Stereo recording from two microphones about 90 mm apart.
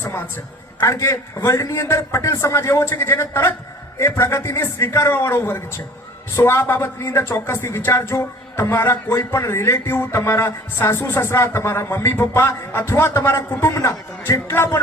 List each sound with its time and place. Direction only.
0.0 s a man's voice: 25° left (ahead or behind)